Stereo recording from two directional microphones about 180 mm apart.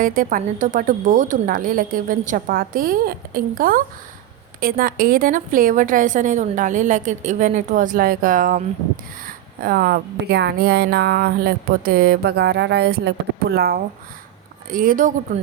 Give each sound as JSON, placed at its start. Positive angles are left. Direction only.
{"t": 0.0, "sound": "a woman's voice", "side_deg": -50}